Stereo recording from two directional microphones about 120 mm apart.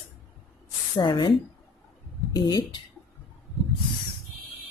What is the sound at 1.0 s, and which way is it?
A woman's voice, 40° left (ahead or behind).